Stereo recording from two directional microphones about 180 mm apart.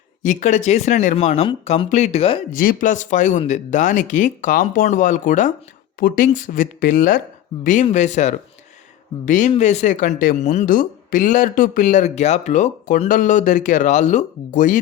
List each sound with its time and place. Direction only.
0.2 s speech: 45° left (ahead or behind)
2.5 s speech: 50° left (ahead or behind)